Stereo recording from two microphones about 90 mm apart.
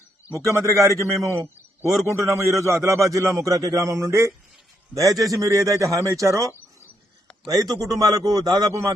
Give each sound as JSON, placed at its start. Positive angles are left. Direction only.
{"t": 0.3, "sound": "a man's voice", "side_deg": -35}